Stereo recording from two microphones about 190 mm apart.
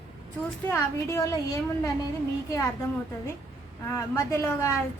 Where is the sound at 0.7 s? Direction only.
15° left (ahead or behind).